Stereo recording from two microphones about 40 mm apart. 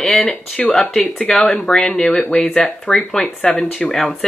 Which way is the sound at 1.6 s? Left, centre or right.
Centre.